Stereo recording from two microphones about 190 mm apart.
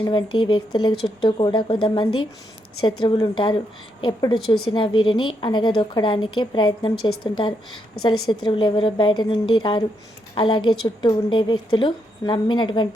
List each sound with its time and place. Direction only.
0.0 s a woman's voice: 25° left (ahead or behind)